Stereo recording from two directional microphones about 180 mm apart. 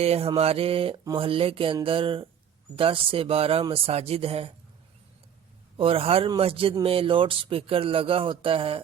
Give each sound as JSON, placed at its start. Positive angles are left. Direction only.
{"t": 0.0, "sound": "speech", "side_deg": -35}
{"t": 5.7, "sound": "speech", "side_deg": -30}